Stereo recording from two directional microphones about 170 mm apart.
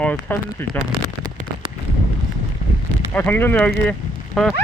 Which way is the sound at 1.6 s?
30° right (ahead or behind).